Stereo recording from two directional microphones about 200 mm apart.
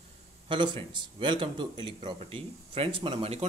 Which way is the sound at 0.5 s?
25° right (ahead or behind).